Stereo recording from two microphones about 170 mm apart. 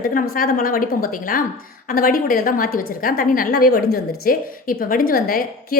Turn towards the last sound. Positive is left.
turn(degrees=60)  # may be behind; listen again after turning